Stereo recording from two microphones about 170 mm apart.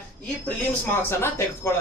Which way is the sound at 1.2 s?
15° left (ahead or behind).